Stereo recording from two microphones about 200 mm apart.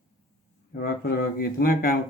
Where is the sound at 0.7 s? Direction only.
50° left (ahead or behind).